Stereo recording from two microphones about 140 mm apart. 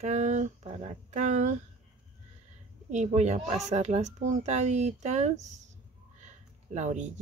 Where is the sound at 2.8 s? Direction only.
55° right (ahead or behind).